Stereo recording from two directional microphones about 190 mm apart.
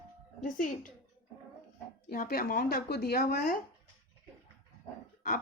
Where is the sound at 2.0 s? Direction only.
55° left (ahead or behind).